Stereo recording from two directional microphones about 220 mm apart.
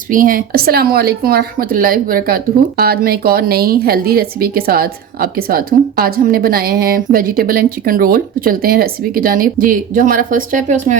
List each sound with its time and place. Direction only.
0.1 s speech: 40° right (ahead or behind)